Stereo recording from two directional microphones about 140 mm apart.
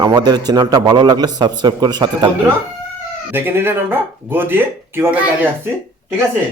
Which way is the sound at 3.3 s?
15° right (ahead or behind).